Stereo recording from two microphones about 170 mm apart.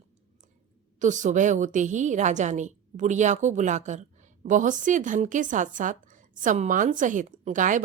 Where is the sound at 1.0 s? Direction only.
45° right (ahead or behind).